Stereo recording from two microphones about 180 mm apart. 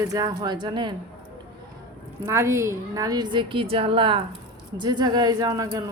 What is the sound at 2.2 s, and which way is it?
Speech, 15° right (ahead or behind).